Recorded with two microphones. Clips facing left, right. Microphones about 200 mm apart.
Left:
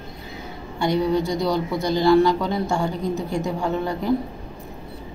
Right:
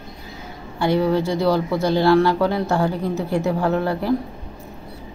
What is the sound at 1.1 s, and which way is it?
Speech, 15° left (ahead or behind).